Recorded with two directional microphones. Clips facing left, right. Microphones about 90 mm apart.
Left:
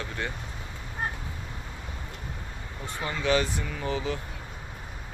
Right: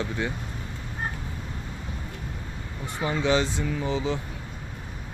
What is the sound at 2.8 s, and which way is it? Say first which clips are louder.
Speech: right 3 dB; 15° right (ahead or behind).